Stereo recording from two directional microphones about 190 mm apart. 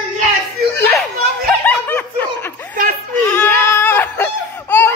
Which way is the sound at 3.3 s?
10° left (ahead or behind).